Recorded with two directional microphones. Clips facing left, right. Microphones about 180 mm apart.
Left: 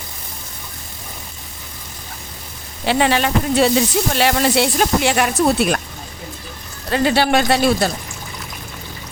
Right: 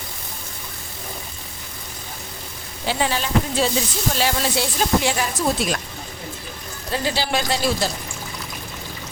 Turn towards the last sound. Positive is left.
turn(degrees=65)  # may be behind; listen again after turning